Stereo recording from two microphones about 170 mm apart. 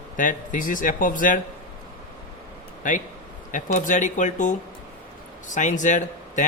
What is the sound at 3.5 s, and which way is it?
Speech, 45° left (ahead or behind).